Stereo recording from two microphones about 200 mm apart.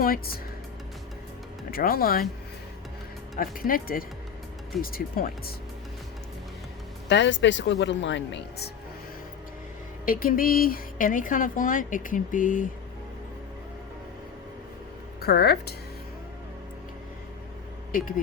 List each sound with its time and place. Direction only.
0.0 s speech: 45° left (ahead or behind)
1.7 s speech: 45° left (ahead or behind)
3.3 s speech: 45° left (ahead or behind)
7.1 s speech: 65° left (ahead or behind)
10.1 s speech: 45° left (ahead or behind)
15.2 s speech: 50° left (ahead or behind)